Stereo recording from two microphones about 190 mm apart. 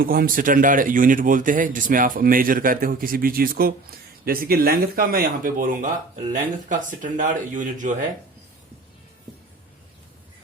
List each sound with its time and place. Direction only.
0.0 s speech: 50° right (ahead or behind)